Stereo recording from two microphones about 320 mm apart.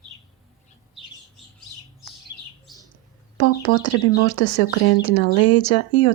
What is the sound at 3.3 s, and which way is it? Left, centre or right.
Speech, left.